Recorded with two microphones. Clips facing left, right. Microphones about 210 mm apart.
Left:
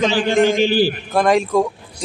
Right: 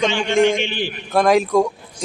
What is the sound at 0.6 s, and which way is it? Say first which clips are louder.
Speech: left 9 dB; 35° left (ahead or behind).